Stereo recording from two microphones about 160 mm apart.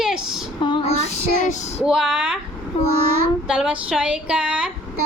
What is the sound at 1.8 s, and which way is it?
Speech, 5° right (ahead or behind).